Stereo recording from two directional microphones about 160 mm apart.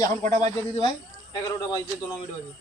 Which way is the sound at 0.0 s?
20° left (ahead or behind).